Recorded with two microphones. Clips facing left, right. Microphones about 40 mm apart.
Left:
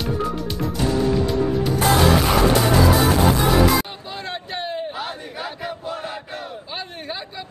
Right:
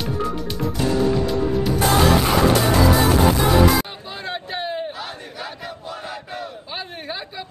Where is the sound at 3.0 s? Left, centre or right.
Centre.